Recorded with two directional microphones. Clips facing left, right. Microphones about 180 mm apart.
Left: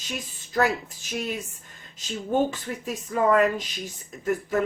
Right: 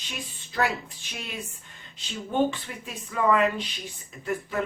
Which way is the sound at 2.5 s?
40° left (ahead or behind).